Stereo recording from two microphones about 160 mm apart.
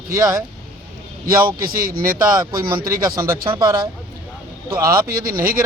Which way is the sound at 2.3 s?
25° right (ahead or behind).